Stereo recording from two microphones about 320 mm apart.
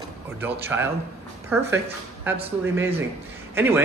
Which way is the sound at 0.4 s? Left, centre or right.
Centre.